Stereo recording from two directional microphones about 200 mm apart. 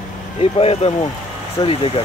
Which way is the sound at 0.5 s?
30° left (ahead or behind).